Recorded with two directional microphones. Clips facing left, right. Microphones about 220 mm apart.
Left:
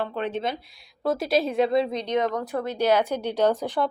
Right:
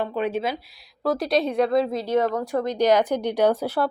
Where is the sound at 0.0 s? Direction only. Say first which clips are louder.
Right 3 dB; 10° right (ahead or behind).